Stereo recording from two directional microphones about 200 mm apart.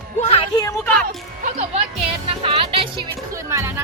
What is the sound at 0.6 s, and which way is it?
Music, 10° left (ahead or behind).